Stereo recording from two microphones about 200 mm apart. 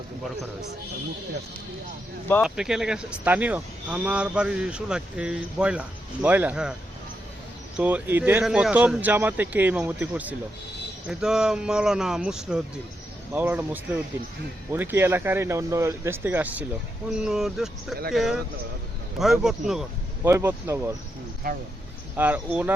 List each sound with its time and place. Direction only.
2.4 s speech: 5° right (ahead or behind)
7.8 s speech: 10° right (ahead or behind)
21.5 s speech: 45° right (ahead or behind)
22.2 s speech: 10° right (ahead or behind)